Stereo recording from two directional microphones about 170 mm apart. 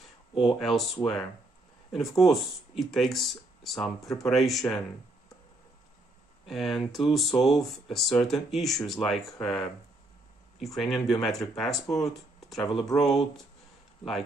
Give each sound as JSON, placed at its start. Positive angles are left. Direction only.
{"t": 0.6, "sound": "speech", "side_deg": 0}
{"t": 6.4, "sound": "speech", "side_deg": 0}
{"t": 12.5, "sound": "speech", "side_deg": 30}
{"t": 12.8, "sound": "speech", "side_deg": 0}